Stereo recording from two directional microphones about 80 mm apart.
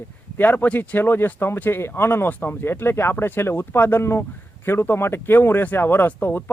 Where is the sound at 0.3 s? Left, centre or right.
Left.